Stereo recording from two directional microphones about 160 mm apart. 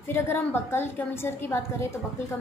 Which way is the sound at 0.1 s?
15° left (ahead or behind).